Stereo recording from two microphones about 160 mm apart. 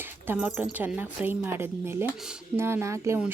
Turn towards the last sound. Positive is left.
turn(degrees=-15)  # may be behind; listen again after turning